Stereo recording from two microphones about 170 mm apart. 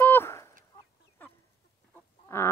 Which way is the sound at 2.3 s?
15° left (ahead or behind).